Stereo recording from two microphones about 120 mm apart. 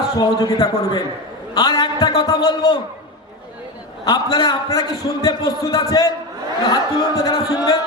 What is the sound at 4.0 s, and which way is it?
A man's voice, 35° left (ahead or behind).